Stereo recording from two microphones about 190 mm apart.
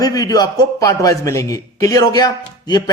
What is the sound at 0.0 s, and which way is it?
A man's voice, 20° left (ahead or behind).